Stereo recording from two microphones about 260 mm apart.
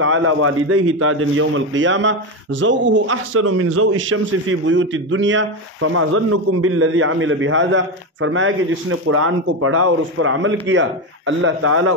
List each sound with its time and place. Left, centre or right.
0.0 s a man's voice: right